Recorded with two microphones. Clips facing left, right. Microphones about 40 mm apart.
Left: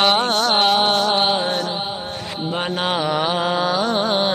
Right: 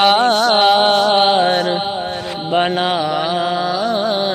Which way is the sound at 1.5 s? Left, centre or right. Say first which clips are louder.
Right 6 dB; right.